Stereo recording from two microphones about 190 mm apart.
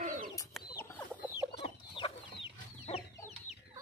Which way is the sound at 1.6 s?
30° left (ahead or behind).